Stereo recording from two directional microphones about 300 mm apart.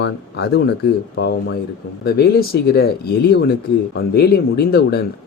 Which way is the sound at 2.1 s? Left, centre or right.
Left.